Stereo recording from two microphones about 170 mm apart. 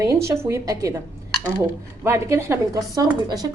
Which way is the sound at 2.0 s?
15° right (ahead or behind).